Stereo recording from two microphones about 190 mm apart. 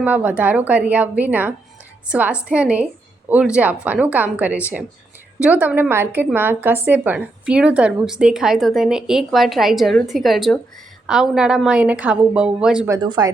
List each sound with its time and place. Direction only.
0.0 s a woman's voice: 10° right (ahead or behind)
12.9 s speech: 20° right (ahead or behind)